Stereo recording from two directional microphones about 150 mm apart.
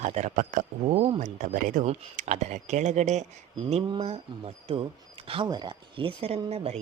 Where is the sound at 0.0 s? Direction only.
50° right (ahead or behind).